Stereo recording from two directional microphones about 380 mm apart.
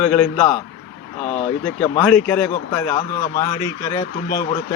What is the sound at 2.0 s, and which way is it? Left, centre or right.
A man's voice, centre.